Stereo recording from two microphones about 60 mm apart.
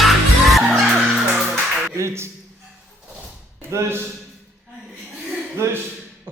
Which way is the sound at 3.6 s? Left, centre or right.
Right.